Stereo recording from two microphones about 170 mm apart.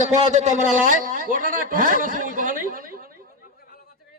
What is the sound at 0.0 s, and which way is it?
A man's voice, 45° right (ahead or behind).